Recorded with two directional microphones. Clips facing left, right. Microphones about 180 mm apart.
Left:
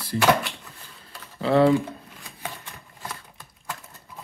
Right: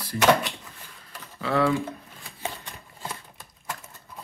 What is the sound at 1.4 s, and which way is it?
Speech, 35° left (ahead or behind).